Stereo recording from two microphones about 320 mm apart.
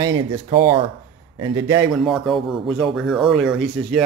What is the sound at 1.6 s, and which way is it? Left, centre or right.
Speech, centre.